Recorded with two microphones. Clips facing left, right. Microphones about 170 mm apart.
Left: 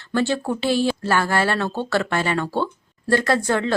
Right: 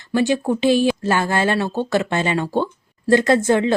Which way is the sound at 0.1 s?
15° right (ahead or behind).